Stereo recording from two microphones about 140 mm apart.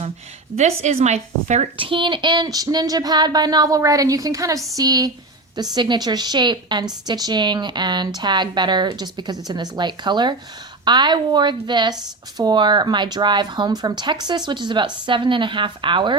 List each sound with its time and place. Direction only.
0.5 s a woman's voice: 50° right (ahead or behind)
1.9 s speech: 35° right (ahead or behind)